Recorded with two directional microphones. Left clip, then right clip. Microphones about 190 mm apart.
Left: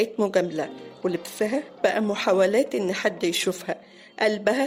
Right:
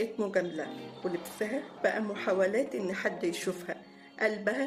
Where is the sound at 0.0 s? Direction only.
50° left (ahead or behind).